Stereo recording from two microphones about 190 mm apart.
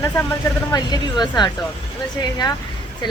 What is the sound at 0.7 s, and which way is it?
Speech, 20° left (ahead or behind).